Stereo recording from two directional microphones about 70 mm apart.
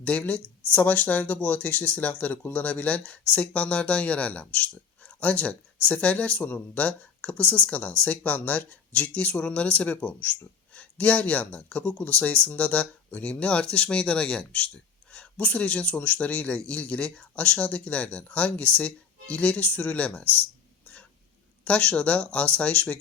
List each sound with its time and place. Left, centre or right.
0.0 s speech: left
21.6 s speech: centre